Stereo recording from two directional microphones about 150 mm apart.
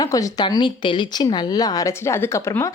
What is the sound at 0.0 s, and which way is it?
Speech, 25° left (ahead or behind).